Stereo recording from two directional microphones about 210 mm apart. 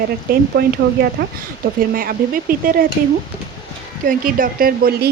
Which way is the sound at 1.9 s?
45° right (ahead or behind).